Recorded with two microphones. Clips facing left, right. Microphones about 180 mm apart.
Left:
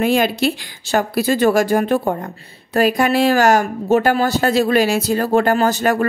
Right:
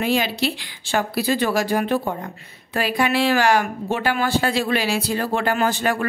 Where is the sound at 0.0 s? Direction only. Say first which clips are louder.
Left 5 dB; 50° left (ahead or behind).